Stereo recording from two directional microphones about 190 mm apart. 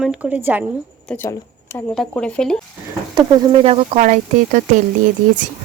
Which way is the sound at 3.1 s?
25° right (ahead or behind).